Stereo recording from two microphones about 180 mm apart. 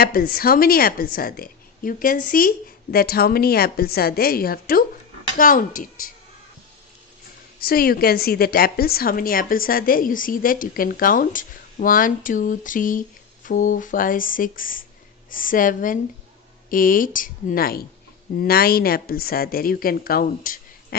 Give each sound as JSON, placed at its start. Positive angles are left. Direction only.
{"t": 0.0, "sound": "a woman's voice", "side_deg": 55}
{"t": 7.6, "sound": "a woman's voice", "side_deg": 55}